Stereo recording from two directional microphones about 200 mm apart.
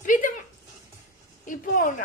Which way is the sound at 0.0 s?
40° left (ahead or behind).